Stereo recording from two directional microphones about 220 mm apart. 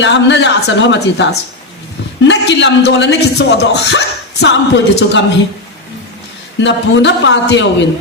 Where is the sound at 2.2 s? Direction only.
55° left (ahead or behind).